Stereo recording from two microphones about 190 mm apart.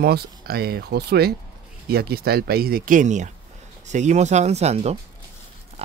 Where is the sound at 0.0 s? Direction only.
55° right (ahead or behind).